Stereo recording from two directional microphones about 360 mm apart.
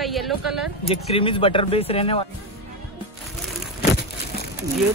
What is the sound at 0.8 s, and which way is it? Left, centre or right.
Speech, centre.